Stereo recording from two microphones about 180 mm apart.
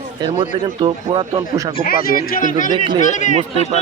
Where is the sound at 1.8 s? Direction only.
55° left (ahead or behind).